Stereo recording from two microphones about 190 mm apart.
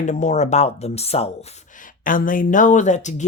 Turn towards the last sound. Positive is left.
turn(degrees=40)  # may be behind; listen again after turning